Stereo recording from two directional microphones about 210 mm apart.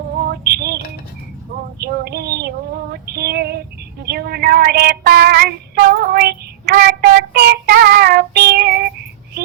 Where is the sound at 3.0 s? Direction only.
50° right (ahead or behind).